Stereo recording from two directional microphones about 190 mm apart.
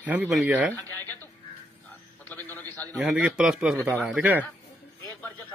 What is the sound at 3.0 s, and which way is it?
Speech, 5° right (ahead or behind).